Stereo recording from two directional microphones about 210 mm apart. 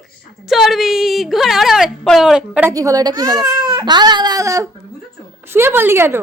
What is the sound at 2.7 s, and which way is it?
Speech, 15° right (ahead or behind).